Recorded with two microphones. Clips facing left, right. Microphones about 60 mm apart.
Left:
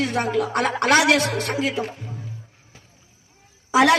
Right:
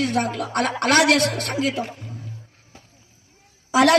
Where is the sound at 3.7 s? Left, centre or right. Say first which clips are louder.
Even; left.